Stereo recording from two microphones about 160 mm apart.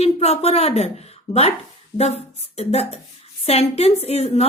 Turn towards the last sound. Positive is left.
turn(degrees=40)  # may be behind; listen again after turning